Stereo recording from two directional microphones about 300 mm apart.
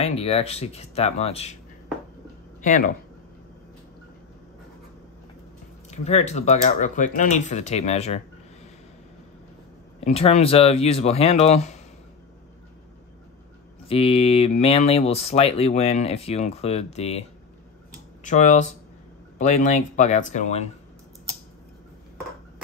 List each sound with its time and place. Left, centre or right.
0.0 s speech: centre
2.6 s speech: left
5.9 s speech: left
9.9 s speech: centre
13.8 s speech: centre
18.2 s speech: left